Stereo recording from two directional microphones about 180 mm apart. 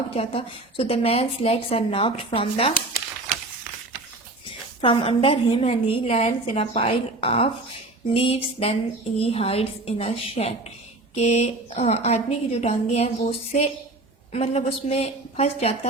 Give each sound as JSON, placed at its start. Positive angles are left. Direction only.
{"t": 0.1, "sound": "a woman's voice", "side_deg": 30}
{"t": 4.4, "sound": "a woman's voice", "side_deg": 30}